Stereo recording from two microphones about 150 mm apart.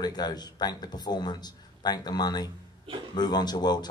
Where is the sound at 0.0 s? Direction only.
25° left (ahead or behind).